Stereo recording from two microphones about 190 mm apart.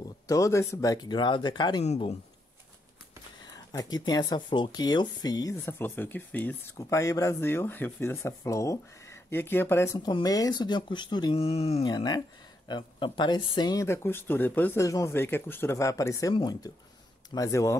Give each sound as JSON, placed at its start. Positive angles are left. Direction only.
{"t": 0.0, "sound": "speech", "side_deg": 15}
{"t": 1.9, "sound": "speech", "side_deg": 35}
{"t": 3.7, "sound": "speech", "side_deg": 20}
{"t": 9.9, "sound": "speech", "side_deg": 20}